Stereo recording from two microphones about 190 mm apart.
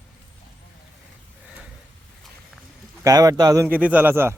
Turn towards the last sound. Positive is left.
turn(degrees=-10)  # may be behind; listen again after turning